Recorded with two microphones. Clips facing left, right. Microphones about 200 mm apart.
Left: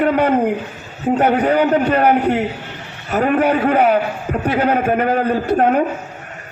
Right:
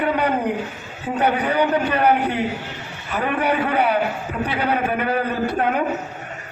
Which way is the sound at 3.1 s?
45° left (ahead or behind).